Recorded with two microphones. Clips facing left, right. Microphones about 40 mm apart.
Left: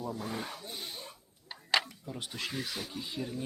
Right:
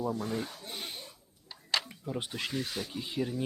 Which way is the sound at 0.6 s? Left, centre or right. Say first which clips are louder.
Right 1 dB; right.